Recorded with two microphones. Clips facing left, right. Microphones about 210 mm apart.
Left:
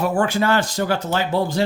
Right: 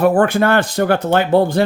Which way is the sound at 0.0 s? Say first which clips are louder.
Right 6 dB; 55° right (ahead or behind).